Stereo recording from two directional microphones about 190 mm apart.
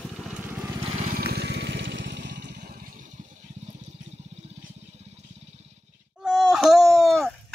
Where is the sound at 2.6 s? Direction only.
45° right (ahead or behind).